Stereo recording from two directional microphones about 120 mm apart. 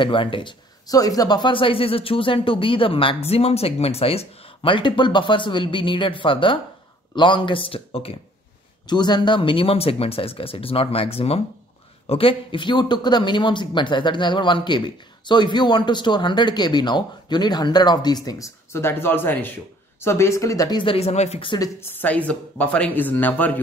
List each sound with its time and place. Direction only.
0.0 s speech: 45° left (ahead or behind)
8.8 s speech: 35° left (ahead or behind)
20.8 s speech: 55° left (ahead or behind)
21.5 s speech: 20° left (ahead or behind)